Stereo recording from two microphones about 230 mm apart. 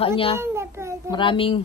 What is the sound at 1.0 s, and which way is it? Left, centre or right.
Speech, left.